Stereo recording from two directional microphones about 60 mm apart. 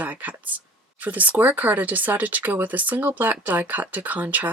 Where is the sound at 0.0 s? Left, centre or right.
Right.